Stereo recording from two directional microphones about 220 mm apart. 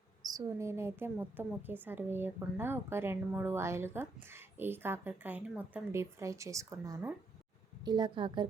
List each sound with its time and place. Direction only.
0.2 s a woman's voice: 15° right (ahead or behind)